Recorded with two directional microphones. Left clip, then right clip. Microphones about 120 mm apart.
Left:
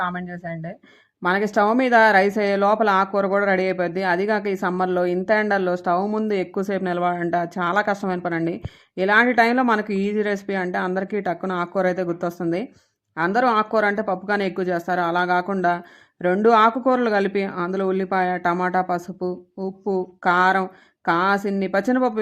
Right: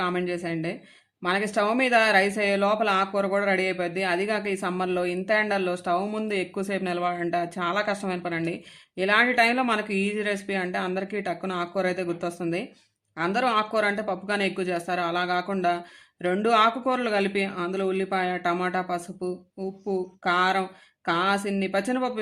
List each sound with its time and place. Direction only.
0.0 s speech: 40° left (ahead or behind)
19.0 s speech: centre (ahead or behind)
20.2 s speech: 40° left (ahead or behind)